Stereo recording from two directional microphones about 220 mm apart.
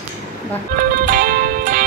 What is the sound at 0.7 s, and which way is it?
Music, 40° right (ahead or behind).